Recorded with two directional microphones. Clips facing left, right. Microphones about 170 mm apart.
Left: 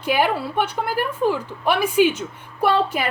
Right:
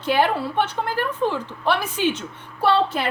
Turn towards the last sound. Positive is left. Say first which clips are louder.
# even
turn(degrees=10)  # may be behind; listen again after turning